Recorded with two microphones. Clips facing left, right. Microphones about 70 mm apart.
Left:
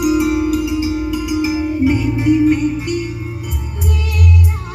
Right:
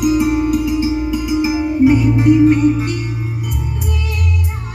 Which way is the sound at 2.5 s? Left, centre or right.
Right.